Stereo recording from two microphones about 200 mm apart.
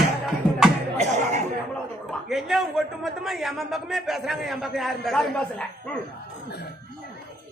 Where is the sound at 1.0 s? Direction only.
35° right (ahead or behind).